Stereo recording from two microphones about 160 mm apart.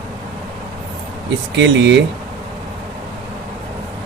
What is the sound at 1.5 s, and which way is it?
Speech, 90° right.